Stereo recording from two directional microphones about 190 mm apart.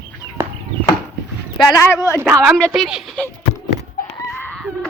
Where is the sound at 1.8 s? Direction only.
15° left (ahead or behind).